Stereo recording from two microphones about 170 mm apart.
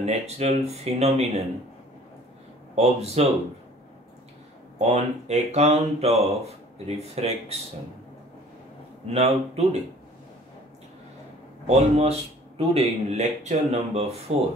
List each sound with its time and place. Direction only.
0.0 s a man's voice: 40° right (ahead or behind)
2.7 s a man's voice: 40° right (ahead or behind)
4.7 s a man's voice: 40° right (ahead or behind)
9.1 s a man's voice: 40° right (ahead or behind)
11.6 s a man's voice: 40° right (ahead or behind)